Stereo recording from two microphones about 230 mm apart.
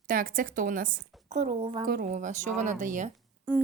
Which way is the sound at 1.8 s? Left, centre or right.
Right.